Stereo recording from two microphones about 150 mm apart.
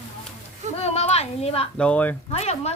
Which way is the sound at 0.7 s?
45° left (ahead or behind).